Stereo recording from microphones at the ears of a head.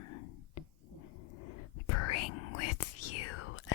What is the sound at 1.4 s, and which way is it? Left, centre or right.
Whispering, left.